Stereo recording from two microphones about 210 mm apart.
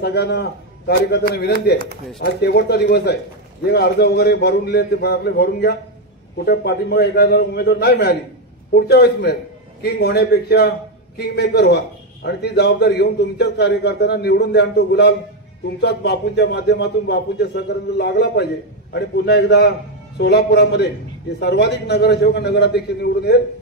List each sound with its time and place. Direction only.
0.0 s a man's voice: 50° left (ahead or behind)